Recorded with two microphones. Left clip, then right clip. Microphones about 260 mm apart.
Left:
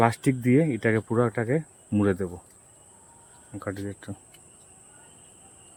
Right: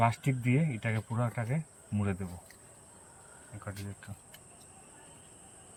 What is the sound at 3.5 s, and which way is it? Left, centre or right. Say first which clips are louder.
Speech: left 12 dB; left.